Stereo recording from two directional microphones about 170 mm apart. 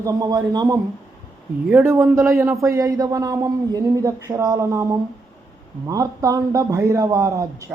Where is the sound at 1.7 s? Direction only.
10° right (ahead or behind).